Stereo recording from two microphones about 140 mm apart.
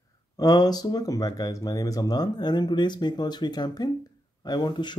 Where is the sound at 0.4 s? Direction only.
25° left (ahead or behind).